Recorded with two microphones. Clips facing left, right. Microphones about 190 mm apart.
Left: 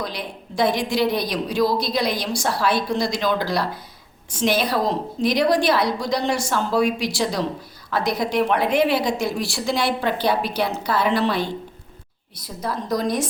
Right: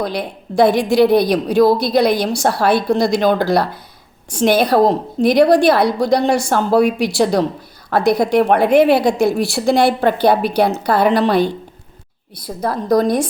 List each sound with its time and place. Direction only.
0.0 s a woman's voice: 60° right (ahead or behind)
12.6 s a woman's voice: 55° right (ahead or behind)